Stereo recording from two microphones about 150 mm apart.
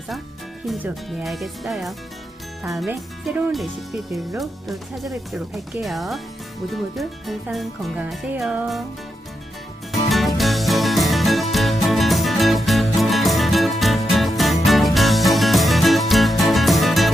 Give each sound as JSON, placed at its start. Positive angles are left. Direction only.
{"t": 1.2, "sound": "speech", "side_deg": 0}
{"t": 10.1, "sound": "music", "side_deg": 0}